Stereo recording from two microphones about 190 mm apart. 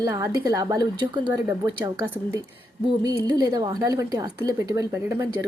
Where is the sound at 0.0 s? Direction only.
15° right (ahead or behind).